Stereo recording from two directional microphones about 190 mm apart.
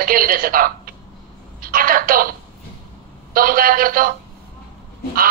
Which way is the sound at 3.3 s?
50° right (ahead or behind).